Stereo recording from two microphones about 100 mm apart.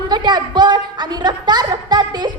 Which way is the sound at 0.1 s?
45° right (ahead or behind).